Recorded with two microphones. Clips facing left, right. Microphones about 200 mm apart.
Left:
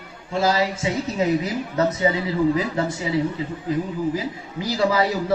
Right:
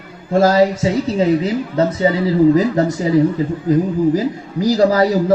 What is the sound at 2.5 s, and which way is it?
A man's voice, 40° right (ahead or behind).